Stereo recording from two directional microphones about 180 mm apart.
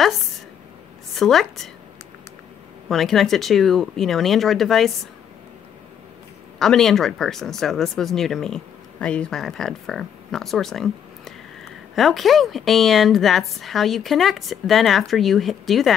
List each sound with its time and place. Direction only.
1.1 s a woman's voice: centre (ahead or behind)
2.9 s a woman's voice: centre (ahead or behind)
6.6 s a woman's voice: centre (ahead or behind)